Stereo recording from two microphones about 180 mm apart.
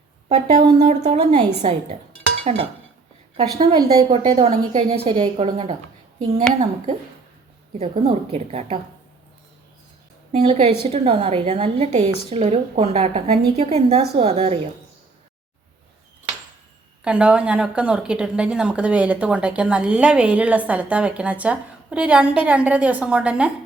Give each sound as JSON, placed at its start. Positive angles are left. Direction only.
{"t": 0.3, "sound": "a woman's voice", "side_deg": -35}
{"t": 3.6, "sound": "a woman's voice", "side_deg": -25}
{"t": 4.1, "sound": "a woman's voice", "side_deg": -35}
{"t": 10.3, "sound": "a woman's voice", "side_deg": -35}
{"t": 17.0, "sound": "a woman's voice", "side_deg": -5}